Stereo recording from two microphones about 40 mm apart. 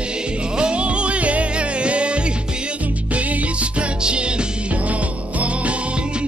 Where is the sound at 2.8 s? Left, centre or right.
Right.